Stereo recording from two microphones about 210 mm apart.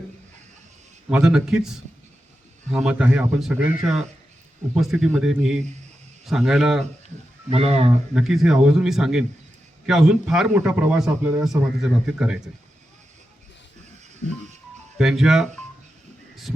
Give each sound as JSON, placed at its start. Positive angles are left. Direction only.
{"t": 1.1, "sound": "a man's voice", "side_deg": -5}
{"t": 7.5, "sound": "speech", "side_deg": -30}
{"t": 8.1, "sound": "a man's voice", "side_deg": 0}
{"t": 14.2, "sound": "music", "side_deg": 60}
{"t": 14.9, "sound": "a man's voice", "side_deg": 0}
{"t": 16.3, "sound": "a sound", "side_deg": 0}